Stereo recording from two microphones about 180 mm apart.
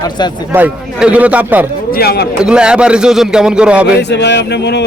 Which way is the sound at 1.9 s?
60° left (ahead or behind).